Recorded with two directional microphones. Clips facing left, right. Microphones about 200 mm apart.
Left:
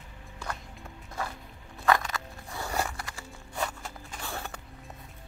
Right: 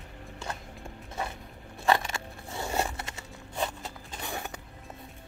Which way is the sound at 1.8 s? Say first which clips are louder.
Even; 25° right (ahead or behind).